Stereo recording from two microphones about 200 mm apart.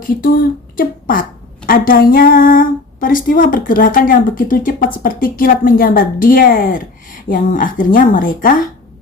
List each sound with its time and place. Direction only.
0.2 s speech: 45° left (ahead or behind)